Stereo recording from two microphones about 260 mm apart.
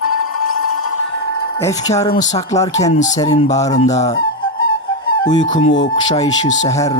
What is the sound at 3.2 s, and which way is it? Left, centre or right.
Speech, centre.